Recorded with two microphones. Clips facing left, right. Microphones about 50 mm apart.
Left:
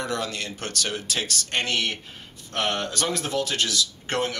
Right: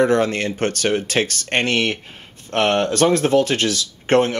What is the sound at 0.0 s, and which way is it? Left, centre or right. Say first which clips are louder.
Speech: right 12 dB; right.